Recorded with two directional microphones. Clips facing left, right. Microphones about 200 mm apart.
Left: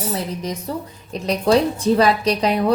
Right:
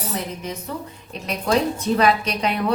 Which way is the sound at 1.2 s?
35° left (ahead or behind).